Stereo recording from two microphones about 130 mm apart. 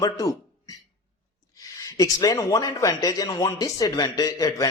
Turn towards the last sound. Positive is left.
turn(degrees=30)  # may be behind; listen again after turning